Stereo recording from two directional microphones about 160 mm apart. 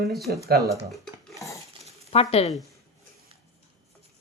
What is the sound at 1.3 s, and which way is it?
Cutlery, 20° left (ahead or behind).